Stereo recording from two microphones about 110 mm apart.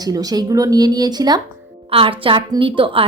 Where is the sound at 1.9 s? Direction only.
55° right (ahead or behind).